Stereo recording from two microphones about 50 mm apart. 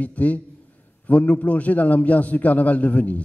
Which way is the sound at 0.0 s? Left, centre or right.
Left.